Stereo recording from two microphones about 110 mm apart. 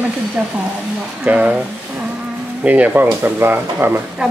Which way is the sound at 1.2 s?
15° right (ahead or behind).